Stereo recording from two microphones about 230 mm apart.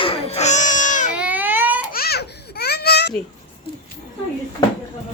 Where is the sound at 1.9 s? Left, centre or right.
Left.